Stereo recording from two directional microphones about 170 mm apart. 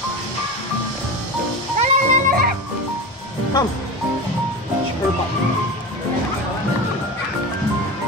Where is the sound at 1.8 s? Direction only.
45° right (ahead or behind).